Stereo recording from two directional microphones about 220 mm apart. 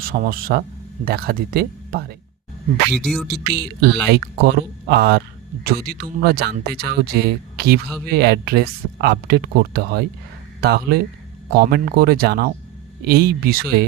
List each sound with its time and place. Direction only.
0.0 s speech: 40° right (ahead or behind)
2.9 s speech: centre (ahead or behind)
3.2 s speech: 50° right (ahead or behind)